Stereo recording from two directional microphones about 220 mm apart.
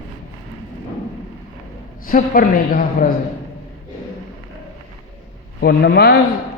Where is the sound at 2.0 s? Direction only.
40° left (ahead or behind).